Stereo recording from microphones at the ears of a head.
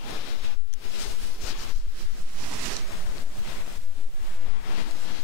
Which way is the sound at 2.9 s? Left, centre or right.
Left.